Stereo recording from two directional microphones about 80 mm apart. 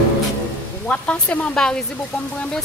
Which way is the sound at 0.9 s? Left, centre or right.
Centre.